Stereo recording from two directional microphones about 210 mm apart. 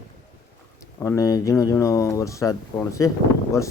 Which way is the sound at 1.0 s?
15° left (ahead or behind).